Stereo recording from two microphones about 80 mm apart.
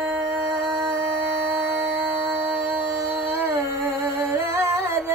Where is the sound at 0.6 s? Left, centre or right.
Centre.